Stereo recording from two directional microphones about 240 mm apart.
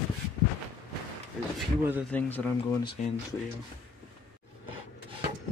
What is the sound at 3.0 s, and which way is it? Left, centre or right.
Speech, left.